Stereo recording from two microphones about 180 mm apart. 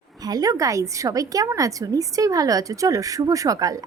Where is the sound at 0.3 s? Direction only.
20° right (ahead or behind).